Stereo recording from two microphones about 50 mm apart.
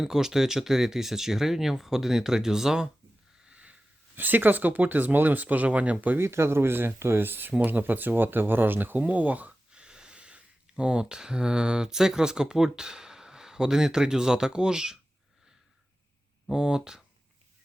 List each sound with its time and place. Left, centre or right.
0.0 s speech: centre
3.5 s sniff: right
4.1 s speech: right
6.1 s speech: right
9.7 s speech: centre
16.5 s speech: centre